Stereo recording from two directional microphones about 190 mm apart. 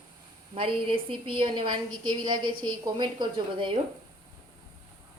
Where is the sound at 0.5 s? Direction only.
30° right (ahead or behind).